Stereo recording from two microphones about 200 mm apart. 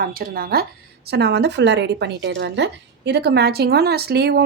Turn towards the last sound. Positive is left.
turn(degrees=-55)  # may be behind; listen again after turning